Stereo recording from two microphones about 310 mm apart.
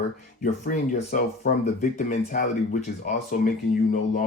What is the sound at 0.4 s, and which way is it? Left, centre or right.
Speech, left.